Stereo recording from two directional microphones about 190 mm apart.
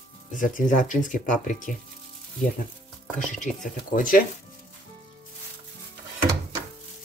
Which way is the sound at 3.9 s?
45° left (ahead or behind).